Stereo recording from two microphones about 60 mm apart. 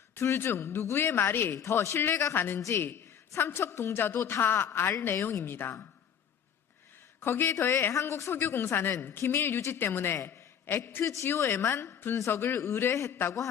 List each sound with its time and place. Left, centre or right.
0.2 s a woman's voice: left
1.5 s a man's voice: left
2.6 s speech: left
2.8 s a woman's voice: left
7.3 s a woman's voice: left
7.9 s a woman's voice: left
10.2 s a sound: left
11.0 s speech: left
11.3 s a woman's voice: left